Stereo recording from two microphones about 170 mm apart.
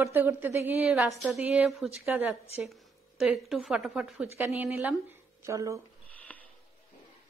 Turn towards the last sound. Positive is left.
turn(degrees=10)  # may be behind; listen again after turning